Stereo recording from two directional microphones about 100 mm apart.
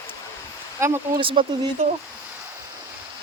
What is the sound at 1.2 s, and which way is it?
Speech, 60° right (ahead or behind).